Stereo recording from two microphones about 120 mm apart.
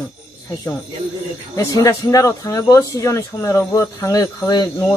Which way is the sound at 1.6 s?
25° left (ahead or behind).